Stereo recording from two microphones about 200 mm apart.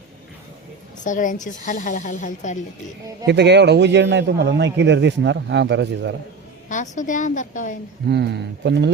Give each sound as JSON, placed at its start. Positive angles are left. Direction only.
{"t": 1.0, "sound": "a woman's voice", "side_deg": 40}
{"t": 3.2, "sound": "a man's voice", "side_deg": -60}
{"t": 6.7, "sound": "a woman's voice", "side_deg": 40}
{"t": 8.1, "sound": "a man's voice", "side_deg": -55}